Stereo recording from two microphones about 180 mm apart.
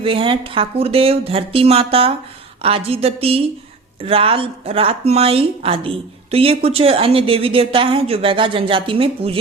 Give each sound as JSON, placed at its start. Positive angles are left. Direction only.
{"t": 0.0, "sound": "a woman's voice", "side_deg": -30}